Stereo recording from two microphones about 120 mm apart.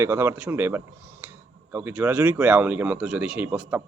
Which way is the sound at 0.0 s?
20° right (ahead or behind).